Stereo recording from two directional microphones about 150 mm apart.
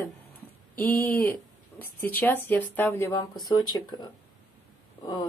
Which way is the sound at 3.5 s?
25° left (ahead or behind).